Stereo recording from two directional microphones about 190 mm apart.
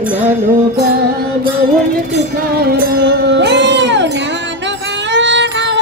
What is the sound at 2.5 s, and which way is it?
Music, 55° right (ahead or behind).